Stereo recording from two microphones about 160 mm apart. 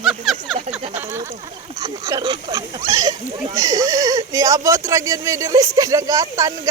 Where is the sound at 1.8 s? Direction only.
25° right (ahead or behind).